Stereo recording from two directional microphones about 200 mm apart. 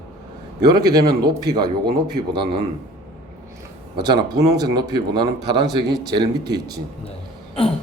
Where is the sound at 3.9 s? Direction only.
20° right (ahead or behind).